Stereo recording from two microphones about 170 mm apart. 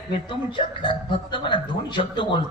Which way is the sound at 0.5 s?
30° left (ahead or behind).